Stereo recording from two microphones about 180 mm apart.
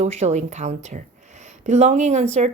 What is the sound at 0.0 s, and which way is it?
Speech, 40° right (ahead or behind).